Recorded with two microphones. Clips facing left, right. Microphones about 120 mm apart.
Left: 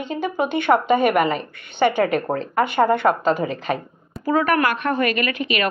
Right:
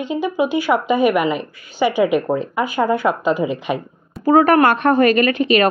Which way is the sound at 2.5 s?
65° left (ahead or behind).